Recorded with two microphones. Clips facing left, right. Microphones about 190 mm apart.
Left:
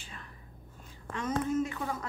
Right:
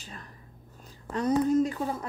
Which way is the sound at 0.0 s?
40° right (ahead or behind).